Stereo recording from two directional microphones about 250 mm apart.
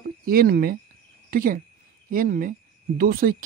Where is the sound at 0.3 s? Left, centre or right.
Right.